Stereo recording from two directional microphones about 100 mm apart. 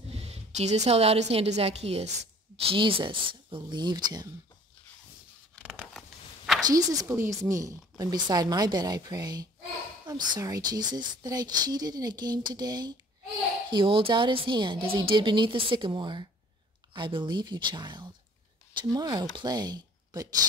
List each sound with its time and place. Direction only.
0.1 s a woman's voice: 90° right
2.6 s a woman's voice: 65° right (ahead or behind); by 4.3 s 40° right (ahead or behind)
5.7 s a sound: 5° left (ahead or behind)
6.7 s a woman's voice: 35° right (ahead or behind)
13.7 s a woman's voice: 55° right (ahead or behind); by 20.2 s 40° right (ahead or behind)